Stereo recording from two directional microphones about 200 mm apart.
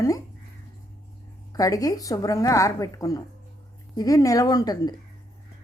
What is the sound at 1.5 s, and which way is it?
A woman's voice, 15° left (ahead or behind).